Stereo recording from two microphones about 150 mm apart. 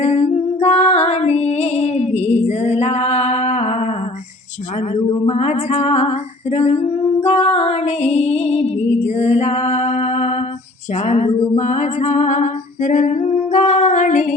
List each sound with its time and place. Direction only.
0.0 s music: 50° left (ahead or behind)
4.9 s female singing: 40° left (ahead or behind); by 14.3 s 60° left (ahead or behind)